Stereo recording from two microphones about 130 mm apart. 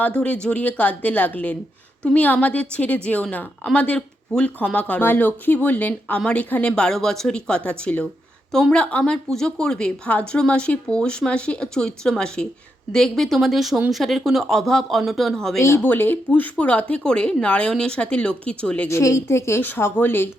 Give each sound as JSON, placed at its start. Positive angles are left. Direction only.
{"t": 0.0, "sound": "a woman's voice", "side_deg": 10}
{"t": 15.5, "sound": "a woman's voice", "side_deg": 20}
{"t": 18.9, "sound": "a woman's voice", "side_deg": 20}